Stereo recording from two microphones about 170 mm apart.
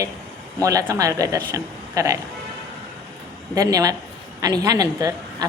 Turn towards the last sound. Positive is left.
turn(degrees=-20)  # may be behind; listen again after turning